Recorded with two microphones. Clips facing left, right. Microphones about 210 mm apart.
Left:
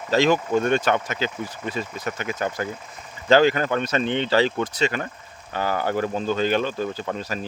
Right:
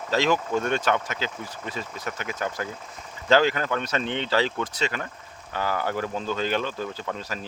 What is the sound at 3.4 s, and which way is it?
Speech, 55° left (ahead or behind).